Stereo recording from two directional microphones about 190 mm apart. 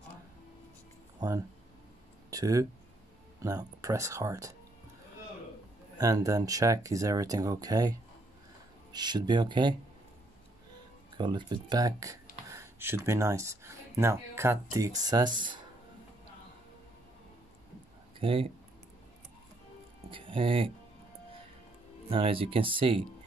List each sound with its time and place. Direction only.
2.3 s speech: 20° right (ahead or behind)
5.9 s speech: 20° right (ahead or behind)
11.1 s speech: 25° right (ahead or behind)
18.2 s speech: 30° right (ahead or behind)
20.1 s speech: 25° right (ahead or behind)
22.1 s speech: 30° right (ahead or behind)